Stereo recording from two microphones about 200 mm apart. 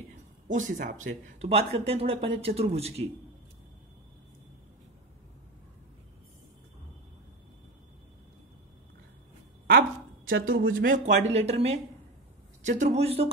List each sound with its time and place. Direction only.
0.5 s speech: 40° right (ahead or behind)
9.7 s a sound: 50° right (ahead or behind)
10.7 s speech: 45° right (ahead or behind)
11.2 s speech: 30° right (ahead or behind)